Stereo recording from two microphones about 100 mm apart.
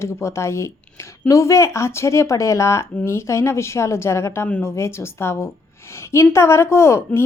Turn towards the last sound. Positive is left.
turn(degrees=25)  # may be behind; listen again after turning